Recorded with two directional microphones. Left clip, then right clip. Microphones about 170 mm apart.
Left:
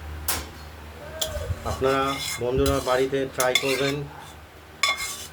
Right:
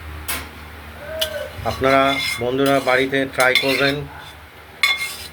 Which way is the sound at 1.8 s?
25° right (ahead or behind).